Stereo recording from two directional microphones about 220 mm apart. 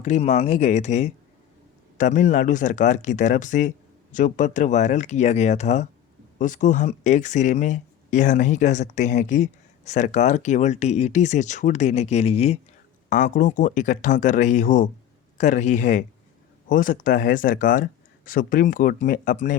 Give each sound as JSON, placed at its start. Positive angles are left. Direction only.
{"t": 0.0, "sound": "speech", "side_deg": 30}